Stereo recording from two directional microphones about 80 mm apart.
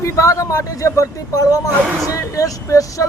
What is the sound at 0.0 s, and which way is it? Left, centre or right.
Speech, left.